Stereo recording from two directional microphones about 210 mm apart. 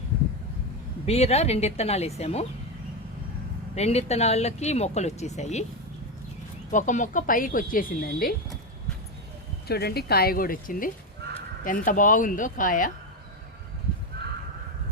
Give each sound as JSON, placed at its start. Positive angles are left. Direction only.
{"t": 1.0, "sound": "a woman's voice", "side_deg": 30}
{"t": 3.8, "sound": "speech", "side_deg": 30}
{"t": 6.7, "sound": "speech", "side_deg": 35}
{"t": 9.6, "sound": "speech", "side_deg": 50}
{"t": 11.2, "sound": "a sound", "side_deg": -50}
{"t": 11.9, "sound": "speech", "side_deg": 40}
{"t": 14.2, "sound": "horse", "side_deg": -50}